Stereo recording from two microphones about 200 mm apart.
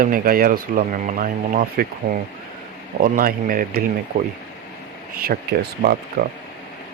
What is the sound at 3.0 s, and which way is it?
Speech, 45° right (ahead or behind).